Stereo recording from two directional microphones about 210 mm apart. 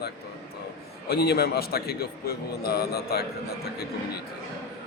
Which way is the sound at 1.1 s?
50° left (ahead or behind).